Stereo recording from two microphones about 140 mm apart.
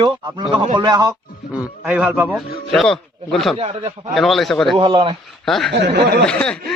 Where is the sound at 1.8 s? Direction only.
10° right (ahead or behind).